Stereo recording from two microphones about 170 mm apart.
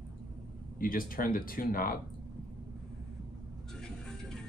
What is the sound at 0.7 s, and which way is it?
Speech, 55° left (ahead or behind).